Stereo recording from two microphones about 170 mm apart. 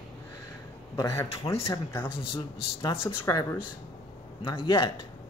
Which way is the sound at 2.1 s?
30° left (ahead or behind).